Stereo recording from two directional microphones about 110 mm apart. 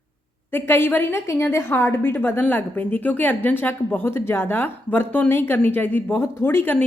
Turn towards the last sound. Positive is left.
turn(degrees=20)  # may be behind; listen again after turning